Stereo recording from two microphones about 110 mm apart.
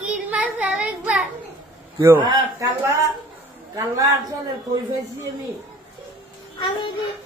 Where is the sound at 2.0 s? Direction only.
20° right (ahead or behind).